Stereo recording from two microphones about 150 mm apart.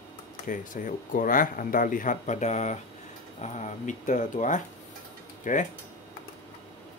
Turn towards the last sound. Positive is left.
turn(degrees=60)  # may be behind; listen again after turning